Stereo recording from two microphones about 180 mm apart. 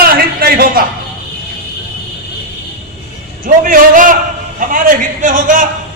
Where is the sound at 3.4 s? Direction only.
50° right (ahead or behind).